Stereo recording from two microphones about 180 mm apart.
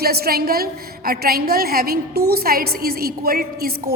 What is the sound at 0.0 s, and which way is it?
A woman's voice, 60° right (ahead or behind).